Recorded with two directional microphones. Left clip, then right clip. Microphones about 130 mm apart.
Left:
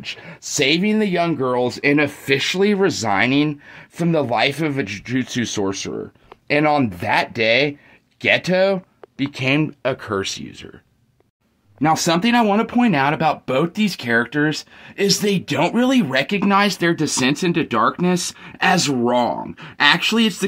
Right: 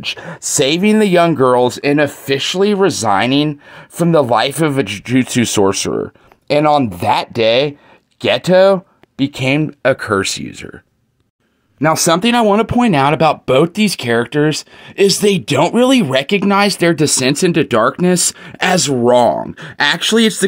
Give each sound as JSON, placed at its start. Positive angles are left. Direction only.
{"t": 0.0, "sound": "speech", "side_deg": -75}
{"t": 0.3, "sound": "speech", "side_deg": -50}
{"t": 0.8, "sound": "speech", "side_deg": -90}
{"t": 1.7, "sound": "speech", "side_deg": -20}
{"t": 3.7, "sound": "speech", "side_deg": -35}
{"t": 6.4, "sound": "speech", "side_deg": -35}
{"t": 11.8, "sound": "speech", "side_deg": -45}